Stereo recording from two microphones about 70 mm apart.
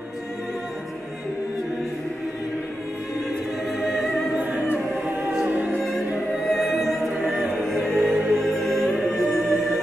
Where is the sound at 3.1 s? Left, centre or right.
Centre.